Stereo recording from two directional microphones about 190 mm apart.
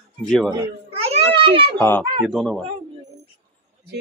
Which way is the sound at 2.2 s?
Centre (ahead or behind).